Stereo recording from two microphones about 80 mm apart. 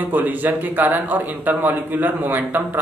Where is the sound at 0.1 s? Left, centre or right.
Right.